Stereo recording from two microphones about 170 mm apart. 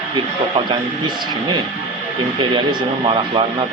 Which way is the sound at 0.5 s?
25° right (ahead or behind).